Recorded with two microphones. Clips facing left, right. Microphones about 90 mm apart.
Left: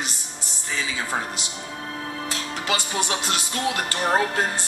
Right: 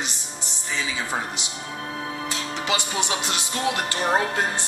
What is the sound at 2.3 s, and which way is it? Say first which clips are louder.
Music: even; 20° right (ahead or behind).